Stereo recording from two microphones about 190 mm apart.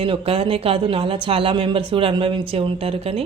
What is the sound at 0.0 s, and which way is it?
Speech, 30° right (ahead or behind).